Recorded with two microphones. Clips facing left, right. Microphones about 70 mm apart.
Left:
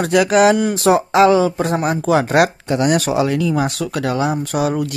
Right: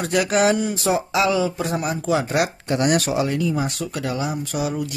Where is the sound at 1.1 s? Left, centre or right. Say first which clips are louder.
Left 8 dB; left.